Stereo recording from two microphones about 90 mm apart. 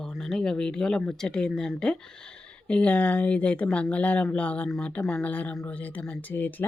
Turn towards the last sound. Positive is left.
turn(degrees=20)  # may be behind; listen again after turning